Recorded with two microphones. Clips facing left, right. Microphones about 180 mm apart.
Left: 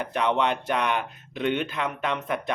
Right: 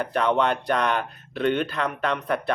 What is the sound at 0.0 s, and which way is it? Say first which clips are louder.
Speech: right 2 dB; 15° left (ahead or behind).